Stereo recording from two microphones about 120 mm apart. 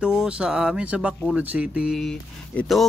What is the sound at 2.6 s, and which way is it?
Speech, centre (ahead or behind).